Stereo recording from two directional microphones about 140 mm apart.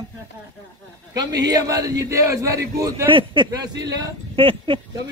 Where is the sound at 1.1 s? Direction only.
25° right (ahead or behind).